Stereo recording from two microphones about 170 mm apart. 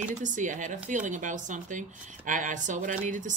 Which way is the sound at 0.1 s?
45° right (ahead or behind).